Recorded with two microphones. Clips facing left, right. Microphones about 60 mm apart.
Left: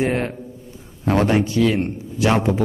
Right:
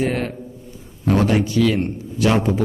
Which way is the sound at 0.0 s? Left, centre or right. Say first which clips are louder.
Left 1 dB; left.